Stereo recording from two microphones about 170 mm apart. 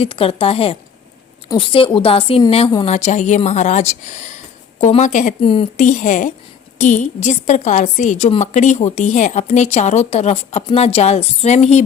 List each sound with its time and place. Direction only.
0.0 s a woman's voice: 35° left (ahead or behind)